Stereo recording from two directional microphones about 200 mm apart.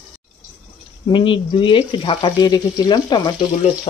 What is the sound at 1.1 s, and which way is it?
Speech, 25° left (ahead or behind).